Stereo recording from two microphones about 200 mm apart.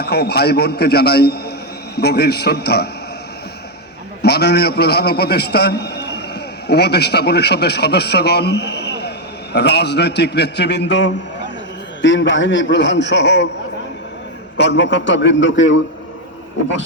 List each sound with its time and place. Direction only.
0.0 s a man's voice: 55° left (ahead or behind)
4.2 s a man's voice: 55° left (ahead or behind)
14.6 s a man's voice: 65° left (ahead or behind)